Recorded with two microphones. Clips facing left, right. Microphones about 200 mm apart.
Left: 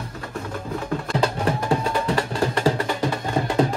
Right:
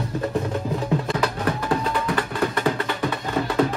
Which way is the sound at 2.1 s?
30° left (ahead or behind).